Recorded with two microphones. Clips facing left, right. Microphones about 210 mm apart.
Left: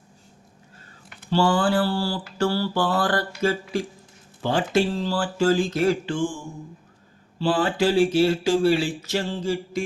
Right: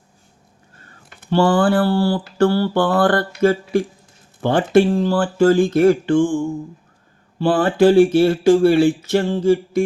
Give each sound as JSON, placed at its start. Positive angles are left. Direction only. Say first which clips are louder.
{"t": 1.3, "sound": "mantra", "louder": "right 5 dB", "side_deg": -55}